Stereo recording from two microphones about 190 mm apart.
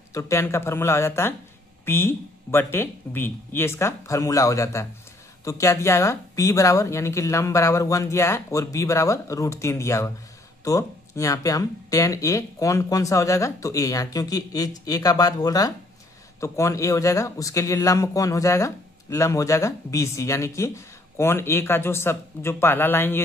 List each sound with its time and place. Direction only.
0.1 s speech: 15° left (ahead or behind)